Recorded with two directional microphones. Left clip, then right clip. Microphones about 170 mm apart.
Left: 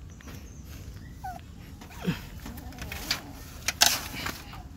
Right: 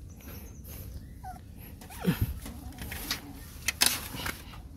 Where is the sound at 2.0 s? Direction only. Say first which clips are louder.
Right 2 dB; 40° right (ahead or behind).